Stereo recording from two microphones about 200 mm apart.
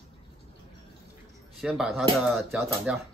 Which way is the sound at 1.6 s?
Centre (ahead or behind).